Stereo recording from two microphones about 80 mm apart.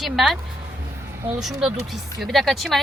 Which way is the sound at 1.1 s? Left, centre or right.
Right.